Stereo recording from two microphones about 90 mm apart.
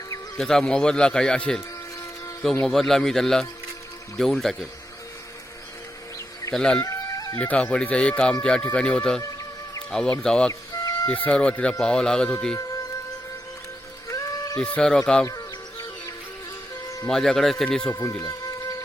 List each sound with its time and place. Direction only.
0.3 s speech: 5° left (ahead or behind)
2.6 s speech: 5° left (ahead or behind)
6.5 s speech: 10° left (ahead or behind)
6.8 s chicken: 40° left (ahead or behind)
7.3 s speech: 15° left (ahead or behind)
9.2 s music: 40° left (ahead or behind)
9.9 s speech: 10° left (ahead or behind)
10.5 s music: 40° left (ahead or behind)
11.1 s speech: 10° left (ahead or behind)
14.1 s a sound: 40° left (ahead or behind)
14.8 s speech: 10° left (ahead or behind)
15.3 s music: 40° left (ahead or behind)
17.1 s speech: 5° left (ahead or behind)
17.9 s speech: 35° left (ahead or behind)